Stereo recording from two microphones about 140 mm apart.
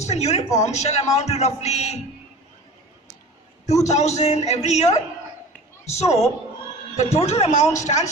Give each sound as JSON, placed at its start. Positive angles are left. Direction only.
{"t": 0.0, "sound": "a man's voice", "side_deg": 50}
{"t": 3.8, "sound": "a man's voice", "side_deg": 55}